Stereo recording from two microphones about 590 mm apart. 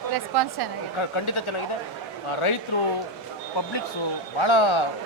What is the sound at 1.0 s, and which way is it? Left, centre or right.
Speech, left.